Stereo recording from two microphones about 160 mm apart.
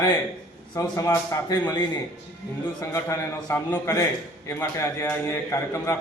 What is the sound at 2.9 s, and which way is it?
A man's voice, 15° left (ahead or behind).